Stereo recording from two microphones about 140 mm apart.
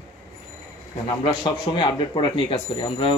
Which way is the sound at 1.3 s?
35° left (ahead or behind).